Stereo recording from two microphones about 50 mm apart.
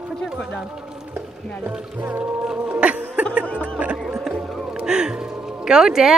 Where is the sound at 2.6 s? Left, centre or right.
Right.